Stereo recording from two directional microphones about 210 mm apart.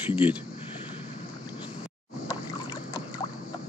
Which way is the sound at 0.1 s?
10° right (ahead or behind).